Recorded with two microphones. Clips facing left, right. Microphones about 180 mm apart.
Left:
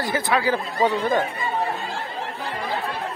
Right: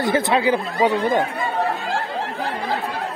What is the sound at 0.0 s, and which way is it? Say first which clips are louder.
A man's voice: right 4 dB; 25° right (ahead or behind).